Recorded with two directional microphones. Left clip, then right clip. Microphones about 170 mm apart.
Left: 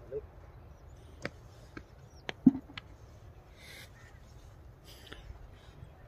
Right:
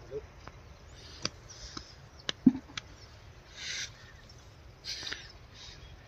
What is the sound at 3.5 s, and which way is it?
Boat, 15° left (ahead or behind).